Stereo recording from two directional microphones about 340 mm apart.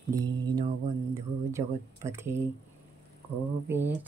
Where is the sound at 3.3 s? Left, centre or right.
Right.